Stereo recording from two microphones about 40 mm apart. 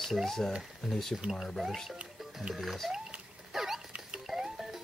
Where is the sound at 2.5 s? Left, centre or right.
Centre.